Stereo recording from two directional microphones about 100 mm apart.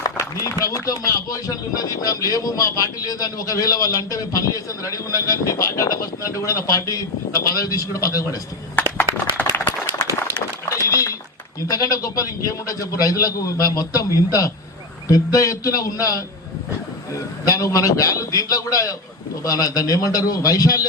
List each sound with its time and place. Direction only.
0.0 s a man's voice: 30° left (ahead or behind)
8.8 s a sound: 15° left (ahead or behind)
9.4 s applause: 15° left (ahead or behind)
10.7 s a sound: 30° left (ahead or behind)
11.7 s a man's voice: 35° left (ahead or behind)
17.4 s a man's voice: 35° left (ahead or behind)